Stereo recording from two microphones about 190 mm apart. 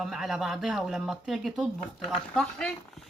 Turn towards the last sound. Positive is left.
turn(degrees=5)  # may be behind; listen again after turning